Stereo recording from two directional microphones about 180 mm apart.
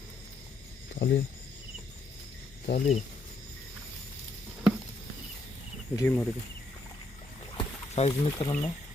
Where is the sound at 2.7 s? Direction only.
40° left (ahead or behind).